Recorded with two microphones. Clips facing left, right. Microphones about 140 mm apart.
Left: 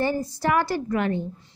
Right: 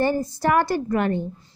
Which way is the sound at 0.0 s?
50° right (ahead or behind).